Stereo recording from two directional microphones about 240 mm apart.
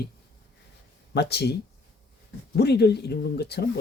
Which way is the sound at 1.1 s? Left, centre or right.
Left.